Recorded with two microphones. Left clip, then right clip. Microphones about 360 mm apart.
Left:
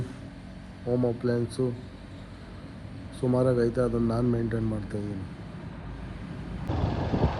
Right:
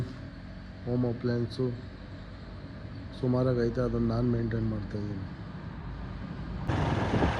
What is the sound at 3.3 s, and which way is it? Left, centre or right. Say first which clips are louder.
Speech: left 4 dB; left.